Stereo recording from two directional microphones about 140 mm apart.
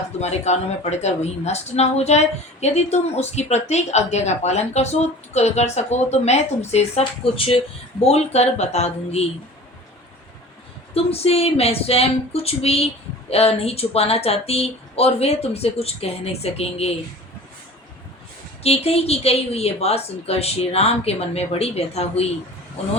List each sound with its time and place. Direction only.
0.2 s a woman's voice: 50° left (ahead or behind)
10.9 s a woman's voice: 45° left (ahead or behind)
18.6 s a woman's voice: 45° left (ahead or behind)